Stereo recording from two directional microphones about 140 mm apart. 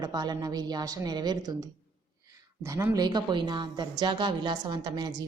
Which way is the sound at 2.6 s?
25° right (ahead or behind).